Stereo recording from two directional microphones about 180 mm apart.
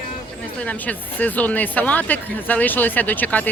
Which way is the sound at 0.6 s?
5° left (ahead or behind).